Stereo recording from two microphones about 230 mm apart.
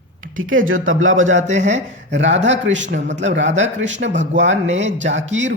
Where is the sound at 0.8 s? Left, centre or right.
Right.